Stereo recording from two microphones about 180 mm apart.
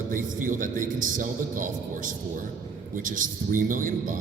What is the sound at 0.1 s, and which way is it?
A man's voice, 50° right (ahead or behind).